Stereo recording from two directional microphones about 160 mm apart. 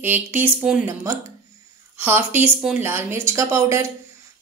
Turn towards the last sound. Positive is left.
turn(degrees=-15)  # may be behind; listen again after turning